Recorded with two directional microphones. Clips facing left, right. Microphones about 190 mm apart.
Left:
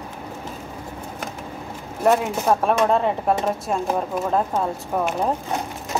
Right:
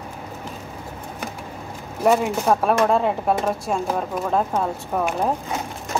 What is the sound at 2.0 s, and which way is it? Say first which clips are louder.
Speech: even; centre (ahead or behind).